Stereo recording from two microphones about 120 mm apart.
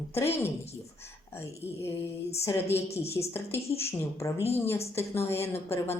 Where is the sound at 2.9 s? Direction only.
60° left (ahead or behind).